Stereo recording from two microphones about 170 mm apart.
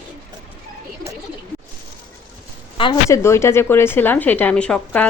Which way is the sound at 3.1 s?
15° left (ahead or behind).